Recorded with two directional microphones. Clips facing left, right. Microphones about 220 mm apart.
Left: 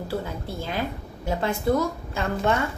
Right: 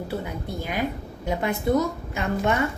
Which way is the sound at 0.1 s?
15° right (ahead or behind).